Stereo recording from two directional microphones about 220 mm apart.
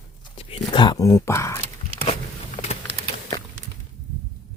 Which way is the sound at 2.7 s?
25° left (ahead or behind).